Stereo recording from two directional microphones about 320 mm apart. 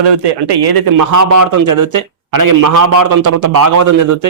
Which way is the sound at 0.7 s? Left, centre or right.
Right.